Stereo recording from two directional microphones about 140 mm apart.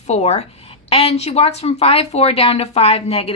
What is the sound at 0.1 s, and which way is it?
A woman's voice, 50° left (ahead or behind).